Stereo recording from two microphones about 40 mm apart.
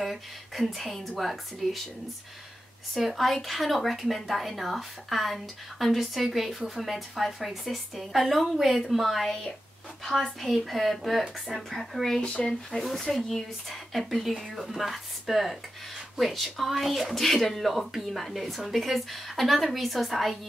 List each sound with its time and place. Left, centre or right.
0.0 s speech: centre
3.0 s speech: centre
10.5 s speech: centre
12.2 s speech: left
12.8 s speech: centre